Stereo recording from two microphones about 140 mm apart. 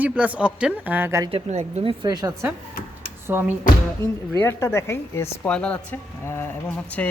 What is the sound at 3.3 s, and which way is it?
Speech, 15° right (ahead or behind).